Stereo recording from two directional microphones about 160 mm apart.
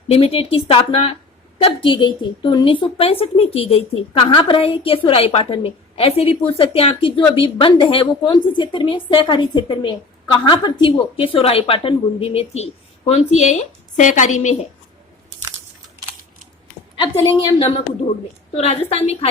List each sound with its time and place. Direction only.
0.1 s a woman's voice: 35° left (ahead or behind)
17.0 s a woman's voice: 30° left (ahead or behind)